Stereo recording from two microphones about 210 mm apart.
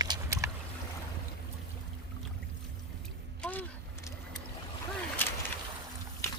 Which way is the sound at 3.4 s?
10° left (ahead or behind).